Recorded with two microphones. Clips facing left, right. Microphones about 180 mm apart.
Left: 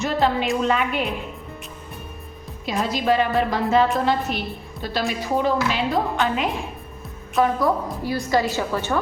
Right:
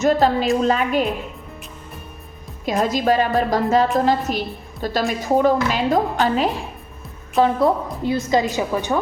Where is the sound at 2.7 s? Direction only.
45° right (ahead or behind); by 9.0 s 15° right (ahead or behind).